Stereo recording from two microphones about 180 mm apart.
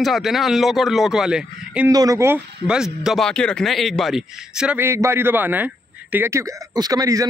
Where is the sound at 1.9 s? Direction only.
20° right (ahead or behind).